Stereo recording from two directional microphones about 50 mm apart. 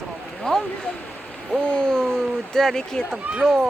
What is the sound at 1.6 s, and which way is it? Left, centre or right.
Speech, centre.